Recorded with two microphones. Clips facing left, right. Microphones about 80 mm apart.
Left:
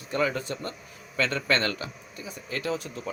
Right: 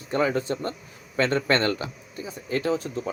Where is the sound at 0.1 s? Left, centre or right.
Right.